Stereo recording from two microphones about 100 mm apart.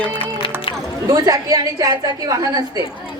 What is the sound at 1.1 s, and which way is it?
A woman's voice, 40° right (ahead or behind).